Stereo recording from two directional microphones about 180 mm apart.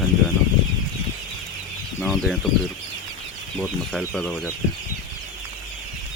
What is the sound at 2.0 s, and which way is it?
Speech, centre (ahead or behind).